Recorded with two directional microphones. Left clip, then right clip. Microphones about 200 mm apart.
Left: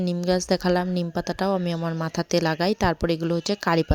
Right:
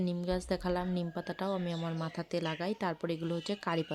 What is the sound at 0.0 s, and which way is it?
A woman's voice, 35° left (ahead or behind).